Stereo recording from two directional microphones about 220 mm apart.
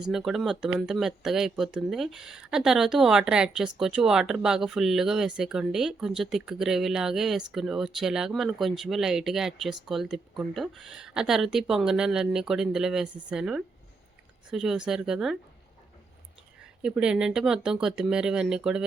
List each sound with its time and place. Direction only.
0.1 s speech: centre (ahead or behind)
16.8 s speech: 5° right (ahead or behind)